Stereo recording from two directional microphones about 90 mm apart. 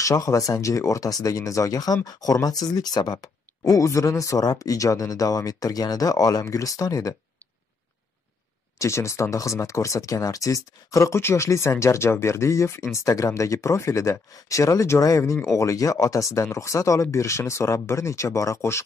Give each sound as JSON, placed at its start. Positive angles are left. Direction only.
{"t": 0.0, "sound": "speech", "side_deg": 40}
{"t": 8.7, "sound": "speech", "side_deg": 35}